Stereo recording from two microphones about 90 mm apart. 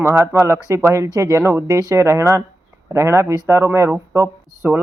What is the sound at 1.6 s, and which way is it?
Speech, 45° right (ahead or behind).